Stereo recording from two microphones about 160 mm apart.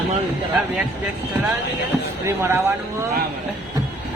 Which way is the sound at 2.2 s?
15° right (ahead or behind).